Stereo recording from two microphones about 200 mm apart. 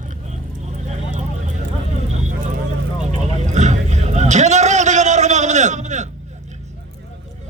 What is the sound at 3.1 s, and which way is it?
Vehicle, 35° right (ahead or behind).